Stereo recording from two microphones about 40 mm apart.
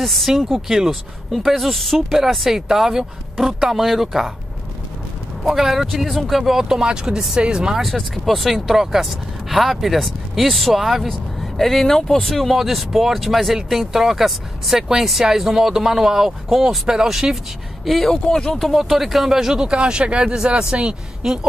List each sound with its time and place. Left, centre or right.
0.0 s speech: centre
5.4 s speech: centre
6.6 s speech: centre
7.8 s speech: centre
11.1 s speech: centre
17.8 s speech: centre; by 21.3 s right